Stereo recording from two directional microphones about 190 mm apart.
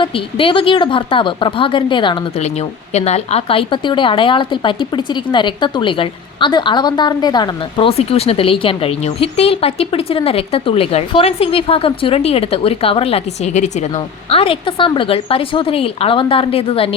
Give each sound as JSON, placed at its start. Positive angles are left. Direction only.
{"t": 0.0, "sound": "a woman's voice", "side_deg": 25}